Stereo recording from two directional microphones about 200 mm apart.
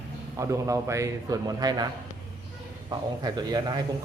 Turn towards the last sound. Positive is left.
turn(degrees=-20)  # may be behind; listen again after turning